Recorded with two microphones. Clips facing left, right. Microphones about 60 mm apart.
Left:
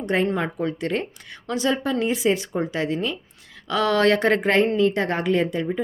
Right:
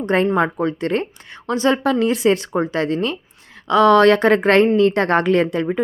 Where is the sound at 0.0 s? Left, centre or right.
Right.